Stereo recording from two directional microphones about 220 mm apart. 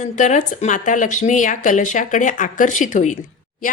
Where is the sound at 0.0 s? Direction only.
35° left (ahead or behind).